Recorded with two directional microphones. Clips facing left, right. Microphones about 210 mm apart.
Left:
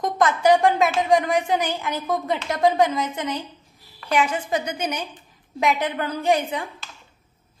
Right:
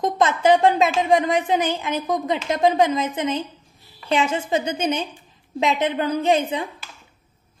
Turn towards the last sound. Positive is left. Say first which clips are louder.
# right 2 dB
turn(degrees=-20)  # may be behind; listen again after turning